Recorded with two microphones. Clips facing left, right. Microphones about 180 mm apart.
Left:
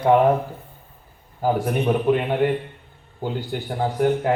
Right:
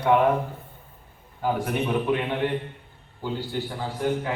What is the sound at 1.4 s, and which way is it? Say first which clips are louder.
A man's voice: left 5 dB; 40° left (ahead or behind).